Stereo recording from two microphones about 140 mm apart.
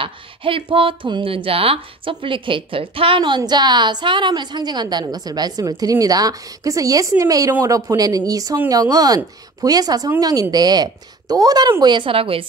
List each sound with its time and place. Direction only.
0.0 s speech: 40° right (ahead or behind)